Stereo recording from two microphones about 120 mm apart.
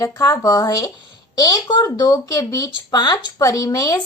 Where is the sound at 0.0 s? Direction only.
30° left (ahead or behind).